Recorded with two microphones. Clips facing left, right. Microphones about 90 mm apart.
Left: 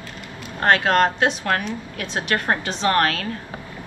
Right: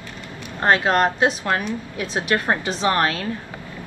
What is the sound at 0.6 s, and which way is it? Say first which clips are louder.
A woman's voice: even; 20° right (ahead or behind).